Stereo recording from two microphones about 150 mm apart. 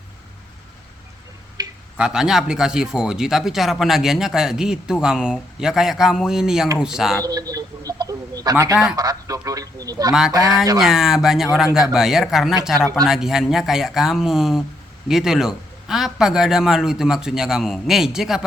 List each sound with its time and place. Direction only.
1.6 s tick-tock: 25° right (ahead or behind)
2.0 s speech: 5° right (ahead or behind)
7.3 s a sound: 25° right (ahead or behind)
9.0 s speech: 25° right (ahead or behind)
10.1 s speech: 5° right (ahead or behind)
10.3 s speech: 25° right (ahead or behind)
10.8 s speech: 5° right (ahead or behind)